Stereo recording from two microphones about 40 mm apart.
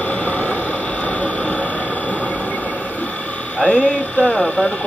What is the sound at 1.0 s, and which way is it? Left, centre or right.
Hum, left.